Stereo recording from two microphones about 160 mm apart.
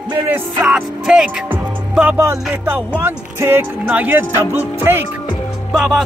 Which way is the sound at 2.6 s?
10° right (ahead or behind).